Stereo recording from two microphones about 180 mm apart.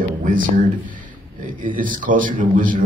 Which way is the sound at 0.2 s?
50° right (ahead or behind).